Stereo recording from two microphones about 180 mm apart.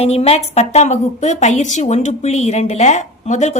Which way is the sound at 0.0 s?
35° left (ahead or behind).